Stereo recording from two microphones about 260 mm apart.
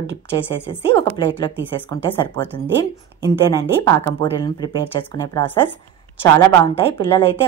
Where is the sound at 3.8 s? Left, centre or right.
Centre.